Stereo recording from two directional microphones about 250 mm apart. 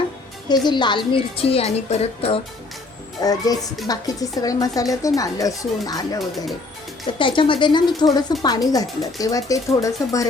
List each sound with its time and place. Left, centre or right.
0.4 s a woman's voice: centre
7.2 s a woman's voice: centre